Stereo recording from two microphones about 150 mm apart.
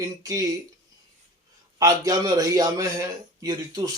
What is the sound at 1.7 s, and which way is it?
Speech, 25° right (ahead or behind).